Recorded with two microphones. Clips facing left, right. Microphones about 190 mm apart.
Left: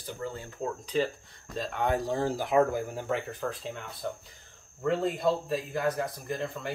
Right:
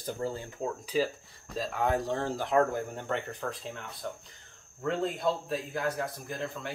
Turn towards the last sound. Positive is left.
turn(degrees=0)  # may be behind; listen again after turning